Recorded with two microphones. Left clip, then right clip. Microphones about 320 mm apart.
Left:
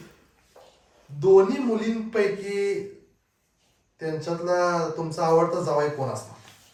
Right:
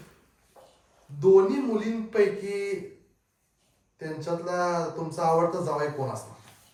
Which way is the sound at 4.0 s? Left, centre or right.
Centre.